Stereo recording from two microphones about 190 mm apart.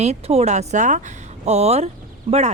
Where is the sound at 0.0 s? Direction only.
35° right (ahead or behind).